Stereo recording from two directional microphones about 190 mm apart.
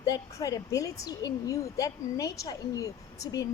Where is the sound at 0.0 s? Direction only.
20° left (ahead or behind).